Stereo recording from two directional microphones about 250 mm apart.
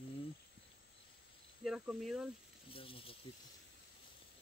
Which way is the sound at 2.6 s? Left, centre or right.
Left.